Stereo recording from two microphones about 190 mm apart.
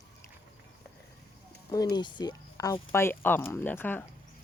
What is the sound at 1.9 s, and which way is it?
Speech, 20° left (ahead or behind).